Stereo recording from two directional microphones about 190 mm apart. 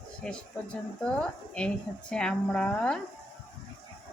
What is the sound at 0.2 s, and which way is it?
Speech, 5° left (ahead or behind).